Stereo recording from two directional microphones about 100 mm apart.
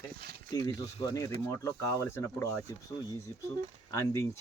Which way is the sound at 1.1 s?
30° left (ahead or behind).